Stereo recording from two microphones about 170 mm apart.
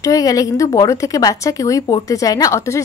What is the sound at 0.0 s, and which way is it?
A woman's voice, 20° left (ahead or behind).